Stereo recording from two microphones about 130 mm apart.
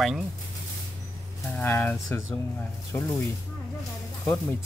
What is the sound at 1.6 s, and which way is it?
Speech, 20° left (ahead or behind).